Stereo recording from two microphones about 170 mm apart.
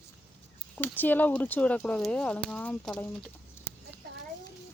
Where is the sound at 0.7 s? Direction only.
10° left (ahead or behind).